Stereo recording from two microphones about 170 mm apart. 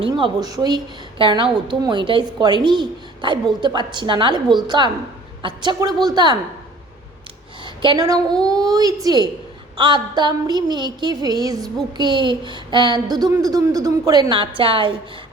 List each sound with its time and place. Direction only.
0.0 s a woman's voice: 25° right (ahead or behind)
7.6 s a sound: 30° right (ahead or behind)
8.4 s a woman's voice: 20° right (ahead or behind)